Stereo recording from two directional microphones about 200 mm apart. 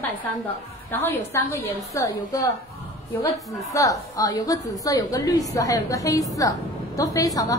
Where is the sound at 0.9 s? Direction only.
10° left (ahead or behind).